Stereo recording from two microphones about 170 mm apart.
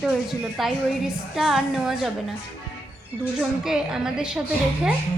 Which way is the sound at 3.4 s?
5° right (ahead or behind).